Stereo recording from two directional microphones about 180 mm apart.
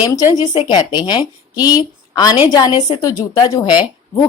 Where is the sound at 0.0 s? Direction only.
20° left (ahead or behind).